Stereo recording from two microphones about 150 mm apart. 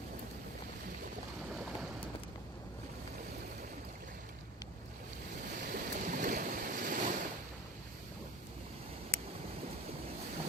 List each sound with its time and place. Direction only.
5.6 s waves: 65° right (ahead or behind)